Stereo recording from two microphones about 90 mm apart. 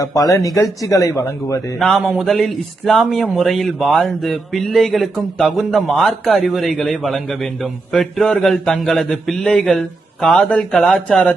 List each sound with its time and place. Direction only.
0.0 s speech: 40° left (ahead or behind)
1.8 s speech: centre (ahead or behind)